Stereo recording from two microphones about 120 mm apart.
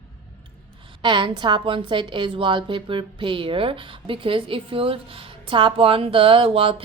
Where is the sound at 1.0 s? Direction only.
40° right (ahead or behind).